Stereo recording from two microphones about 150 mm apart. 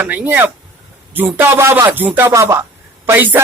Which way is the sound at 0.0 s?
10° right (ahead or behind).